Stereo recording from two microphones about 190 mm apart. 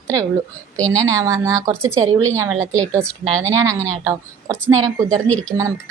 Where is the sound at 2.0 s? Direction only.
90° right.